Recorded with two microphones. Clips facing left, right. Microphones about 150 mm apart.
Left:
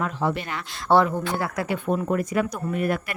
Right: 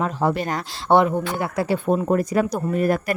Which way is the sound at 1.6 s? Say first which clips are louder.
Right 8 dB; 35° right (ahead or behind).